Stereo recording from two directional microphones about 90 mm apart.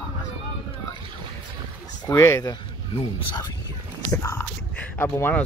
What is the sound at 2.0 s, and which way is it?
Speech, 35° left (ahead or behind).